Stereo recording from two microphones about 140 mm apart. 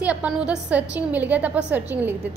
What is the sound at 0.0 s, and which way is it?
A woman's voice, 10° right (ahead or behind).